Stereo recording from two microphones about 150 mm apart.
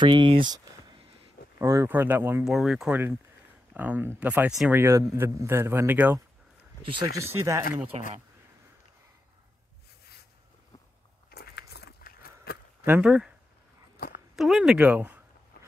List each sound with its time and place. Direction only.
0.0 s a man's voice: 30° right (ahead or behind); by 2.4 s 15° right (ahead or behind)
2.4 s a man's voice: 5° right (ahead or behind)
7.2 s speech: 20° right (ahead or behind)
7.9 s speech: 45° right (ahead or behind)
11.2 s biting: 90° left
12.8 s speech: 10° right (ahead or behind)
13.9 s a sound: 90° left
14.3 s speech: centre (ahead or behind)